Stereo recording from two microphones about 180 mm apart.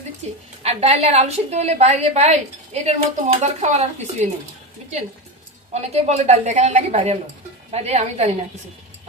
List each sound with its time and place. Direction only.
0.6 s a woman's voice: 35° right (ahead or behind)
5.8 s a woman's voice: 35° right (ahead or behind)